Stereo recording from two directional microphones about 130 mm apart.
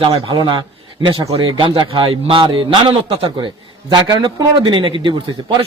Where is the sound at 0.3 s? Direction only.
40° right (ahead or behind).